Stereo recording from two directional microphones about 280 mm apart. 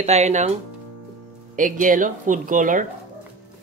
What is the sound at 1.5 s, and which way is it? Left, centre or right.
Speech, right.